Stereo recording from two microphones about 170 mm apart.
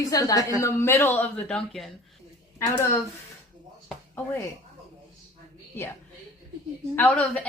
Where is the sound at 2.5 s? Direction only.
15° left (ahead or behind).